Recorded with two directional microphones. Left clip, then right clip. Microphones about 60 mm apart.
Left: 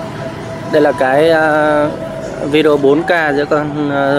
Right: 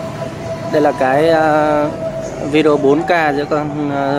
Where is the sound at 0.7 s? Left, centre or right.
Centre.